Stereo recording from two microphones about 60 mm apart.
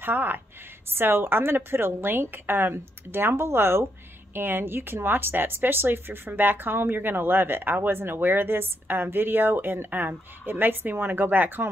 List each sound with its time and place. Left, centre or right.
0.0 s speech: right